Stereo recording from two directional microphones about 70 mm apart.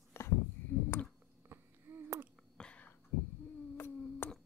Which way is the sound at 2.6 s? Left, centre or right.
Centre.